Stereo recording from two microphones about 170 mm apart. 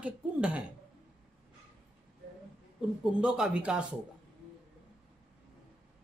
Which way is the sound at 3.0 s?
5° right (ahead or behind).